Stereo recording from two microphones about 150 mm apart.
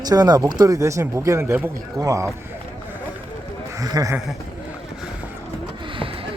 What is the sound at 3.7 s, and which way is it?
Speech, 25° right (ahead or behind).